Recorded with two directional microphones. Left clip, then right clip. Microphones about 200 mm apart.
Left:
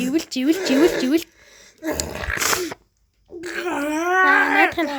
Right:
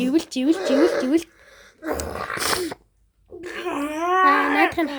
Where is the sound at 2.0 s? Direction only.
55° left (ahead or behind).